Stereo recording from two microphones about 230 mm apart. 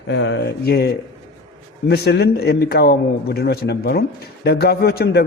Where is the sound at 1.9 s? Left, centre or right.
Left.